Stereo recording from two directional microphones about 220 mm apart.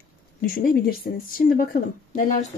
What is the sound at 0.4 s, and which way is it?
Speech, 40° left (ahead or behind).